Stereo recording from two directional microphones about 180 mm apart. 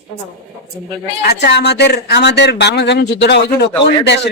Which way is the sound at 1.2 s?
65° left (ahead or behind).